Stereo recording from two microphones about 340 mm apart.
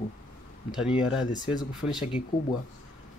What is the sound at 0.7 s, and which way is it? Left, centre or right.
Speech, centre.